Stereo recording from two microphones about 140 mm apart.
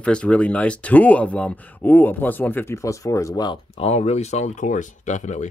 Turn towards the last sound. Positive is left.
turn(degrees=60)  # may be behind; listen again after turning